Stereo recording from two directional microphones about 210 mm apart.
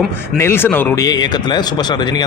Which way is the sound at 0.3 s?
10° left (ahead or behind).